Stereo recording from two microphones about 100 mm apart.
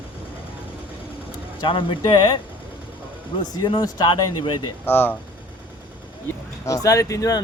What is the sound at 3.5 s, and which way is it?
Speech, 45° left (ahead or behind).